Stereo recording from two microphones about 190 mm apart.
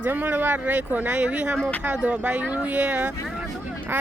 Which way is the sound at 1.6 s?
5° left (ahead or behind).